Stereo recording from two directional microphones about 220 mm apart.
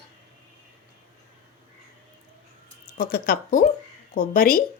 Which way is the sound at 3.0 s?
40° left (ahead or behind).